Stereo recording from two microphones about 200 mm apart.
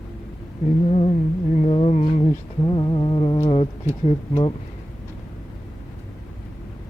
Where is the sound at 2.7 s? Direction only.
20° left (ahead or behind).